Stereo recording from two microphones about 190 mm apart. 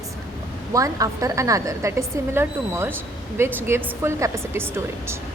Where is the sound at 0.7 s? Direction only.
15° right (ahead or behind).